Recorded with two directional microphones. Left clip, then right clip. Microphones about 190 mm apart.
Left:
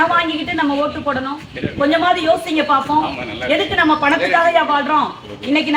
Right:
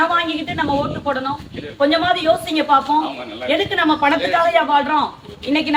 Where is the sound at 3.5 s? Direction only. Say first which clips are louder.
Left 2 dB; 15° right (ahead or behind).